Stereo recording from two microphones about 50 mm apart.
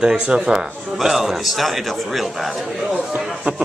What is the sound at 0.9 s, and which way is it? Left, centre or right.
A man's voice, centre.